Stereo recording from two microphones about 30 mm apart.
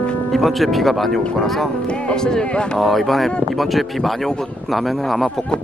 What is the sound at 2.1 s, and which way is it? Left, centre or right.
Speech, left.